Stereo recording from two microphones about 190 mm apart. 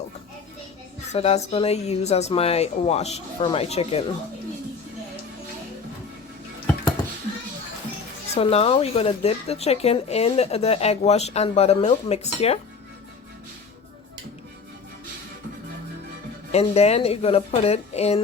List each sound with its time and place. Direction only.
1.1 s speech: 35° left (ahead or behind)
8.4 s speech: 30° left (ahead or behind)
16.5 s speech: 35° left (ahead or behind)